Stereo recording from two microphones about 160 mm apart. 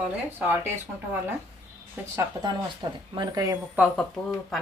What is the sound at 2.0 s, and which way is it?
Speech, 10° right (ahead or behind).